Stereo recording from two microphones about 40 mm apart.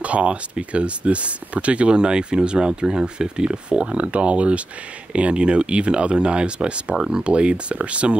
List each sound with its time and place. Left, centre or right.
0.0 s speech: right